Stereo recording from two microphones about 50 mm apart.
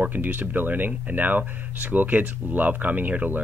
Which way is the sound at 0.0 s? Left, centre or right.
Right.